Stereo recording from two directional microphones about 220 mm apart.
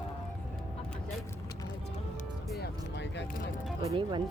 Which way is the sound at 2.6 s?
50° left (ahead or behind).